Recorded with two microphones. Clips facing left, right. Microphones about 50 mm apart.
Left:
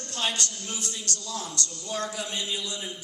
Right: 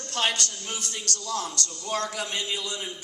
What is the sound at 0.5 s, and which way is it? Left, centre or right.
Speech, right.